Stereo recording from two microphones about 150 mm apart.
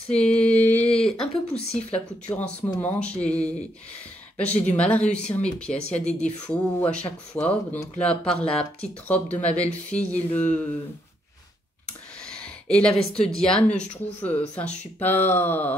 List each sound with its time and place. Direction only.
0.2 s mantra: 5° left (ahead or behind)
0.9 s a sound: 5° left (ahead or behind)
1.5 s a woman's voice: 40° left (ahead or behind)
2.2 s speech: 10° left (ahead or behind)
4.7 s speech: 10° left (ahead or behind)
5.7 s a woman's voice: 45° left (ahead or behind)
6.4 s speech: 10° left (ahead or behind)
8.4 s speech: 40° left (ahead or behind)
9.0 s speech: 10° left (ahead or behind)
12.3 s a sound: 5° left (ahead or behind)
13.4 s speech: 5° left (ahead or behind)